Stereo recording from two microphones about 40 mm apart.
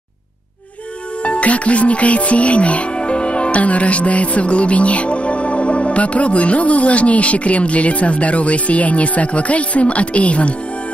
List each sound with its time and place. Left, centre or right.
1.2 s speech: left